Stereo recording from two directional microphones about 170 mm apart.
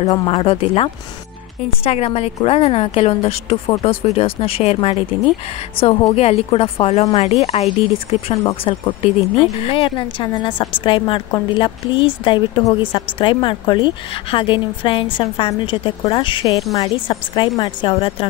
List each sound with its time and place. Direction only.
0.1 s a woman's voice: 30° left (ahead or behind)